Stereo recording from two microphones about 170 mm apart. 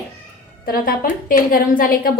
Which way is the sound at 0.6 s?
60° left (ahead or behind).